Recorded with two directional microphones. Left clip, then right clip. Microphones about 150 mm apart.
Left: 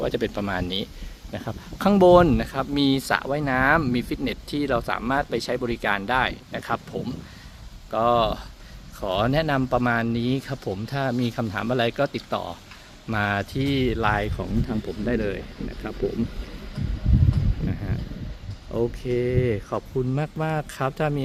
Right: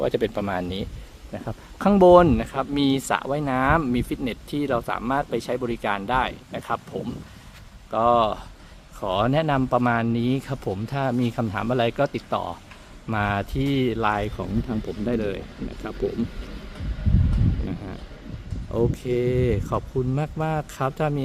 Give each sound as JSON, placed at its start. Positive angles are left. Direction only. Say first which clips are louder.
{"t": 0.0, "sound": "speech", "louder": "right 2 dB", "side_deg": -15}
{"t": 0.5, "sound": "speech", "louder": "left 1 dB", "side_deg": -5}
{"t": 7.9, "sound": "speech", "louder": "right 1 dB", "side_deg": 0}
{"t": 18.7, "sound": "speech", "louder": "right 1 dB", "side_deg": -10}